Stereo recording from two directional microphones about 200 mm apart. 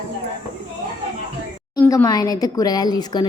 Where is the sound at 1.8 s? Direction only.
15° left (ahead or behind).